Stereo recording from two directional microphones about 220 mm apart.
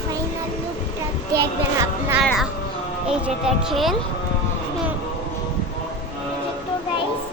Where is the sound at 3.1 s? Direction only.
5° right (ahead or behind).